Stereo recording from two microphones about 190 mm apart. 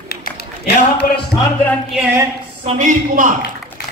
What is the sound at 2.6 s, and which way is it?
Speech, 40° right (ahead or behind).